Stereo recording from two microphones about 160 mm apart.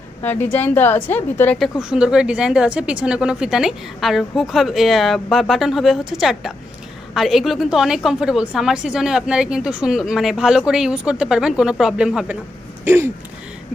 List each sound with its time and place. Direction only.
0.2 s a woman's voice: 10° left (ahead or behind)
1.8 s a woman's voice: 5° right (ahead or behind)
12.8 s a sound: 15° right (ahead or behind)